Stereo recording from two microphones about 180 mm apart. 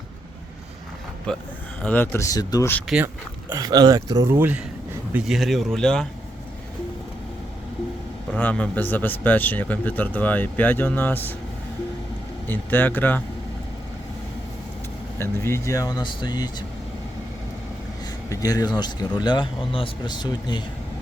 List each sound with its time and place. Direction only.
1.8 s speech: 10° left (ahead or behind)
2.8 s speech: 5° right (ahead or behind)
3.5 s speech: 20° right (ahead or behind)
4.3 s speech: 10° right (ahead or behind)
8.3 s speech: 5° left (ahead or behind)
12.5 s speech: 10° left (ahead or behind)
15.2 s a man's voice: 15° left (ahead or behind)
18.0 s a sound: 20° left (ahead or behind)
18.8 s a man's voice: 25° left (ahead or behind)